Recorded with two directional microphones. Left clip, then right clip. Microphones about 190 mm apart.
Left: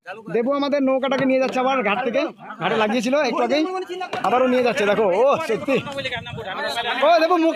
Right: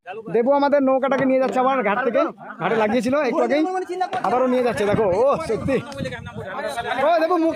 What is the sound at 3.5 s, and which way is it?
Speech, 45° right (ahead or behind).